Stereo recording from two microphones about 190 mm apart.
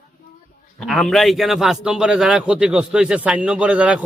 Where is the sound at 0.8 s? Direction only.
Centre (ahead or behind).